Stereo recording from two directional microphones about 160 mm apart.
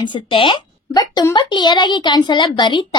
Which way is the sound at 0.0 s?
30° left (ahead or behind).